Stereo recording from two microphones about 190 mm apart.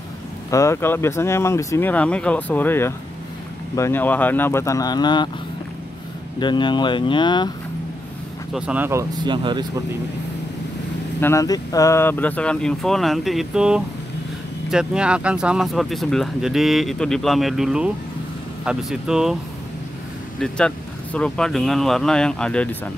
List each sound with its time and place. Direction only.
0.5 s speech: 15° left (ahead or behind)
6.4 s speech: 25° left (ahead or behind)
8.5 s speech: 5° right (ahead or behind)
9.2 s speech: 25° right (ahead or behind)
11.1 s speech: 15° left (ahead or behind); by 19.3 s 5° right (ahead or behind)
20.3 s speech: 5° left (ahead or behind)